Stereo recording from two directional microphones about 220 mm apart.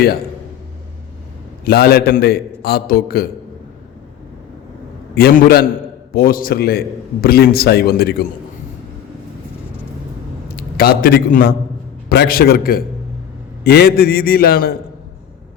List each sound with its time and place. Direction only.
1.6 s a man's voice: 45° left (ahead or behind)
5.1 s a man's voice: 45° left (ahead or behind)
10.6 s a man's voice: 45° left (ahead or behind)